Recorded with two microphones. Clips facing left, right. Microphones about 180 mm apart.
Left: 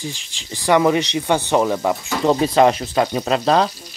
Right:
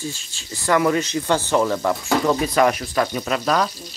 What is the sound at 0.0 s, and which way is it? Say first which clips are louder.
Speech: even; 15° left (ahead or behind).